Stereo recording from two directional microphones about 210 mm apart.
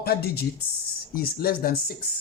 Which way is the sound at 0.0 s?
45° left (ahead or behind).